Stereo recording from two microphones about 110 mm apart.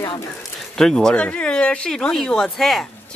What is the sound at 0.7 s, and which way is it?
Speech, 5° left (ahead or behind).